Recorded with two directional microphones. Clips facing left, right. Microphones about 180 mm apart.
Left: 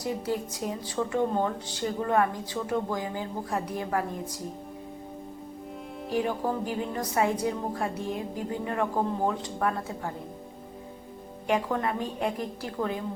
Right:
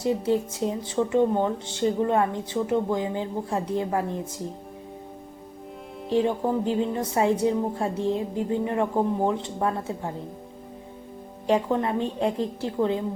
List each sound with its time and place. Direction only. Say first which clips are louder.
0.0 s speech: right 6 dB; 25° right (ahead or behind)
6.1 s speech: right 5 dB; 25° right (ahead or behind)
11.4 s speech: right 4 dB; 25° right (ahead or behind)